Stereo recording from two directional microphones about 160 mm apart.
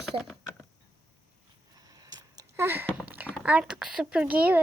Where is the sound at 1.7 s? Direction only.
25° right (ahead or behind).